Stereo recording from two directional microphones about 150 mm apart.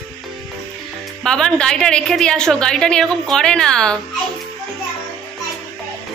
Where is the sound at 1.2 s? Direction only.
5° left (ahead or behind).